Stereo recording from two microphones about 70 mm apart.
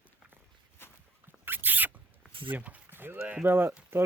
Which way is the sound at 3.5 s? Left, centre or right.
Right.